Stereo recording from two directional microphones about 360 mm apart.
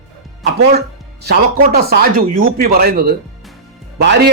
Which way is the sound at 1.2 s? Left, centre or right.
Right.